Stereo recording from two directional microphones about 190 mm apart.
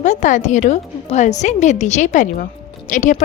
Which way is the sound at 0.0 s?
40° left (ahead or behind).